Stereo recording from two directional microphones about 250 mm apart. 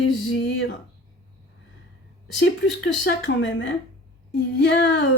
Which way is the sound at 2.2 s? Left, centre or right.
Left.